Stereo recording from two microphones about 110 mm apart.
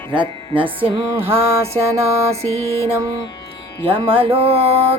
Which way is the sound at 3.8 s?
55° right (ahead or behind).